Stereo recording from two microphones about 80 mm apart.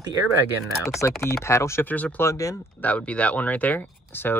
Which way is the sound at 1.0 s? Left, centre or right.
Left.